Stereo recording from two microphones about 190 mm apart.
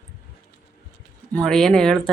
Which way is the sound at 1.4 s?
5° left (ahead or behind).